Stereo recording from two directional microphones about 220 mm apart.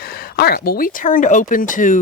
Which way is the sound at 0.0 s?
45° left (ahead or behind).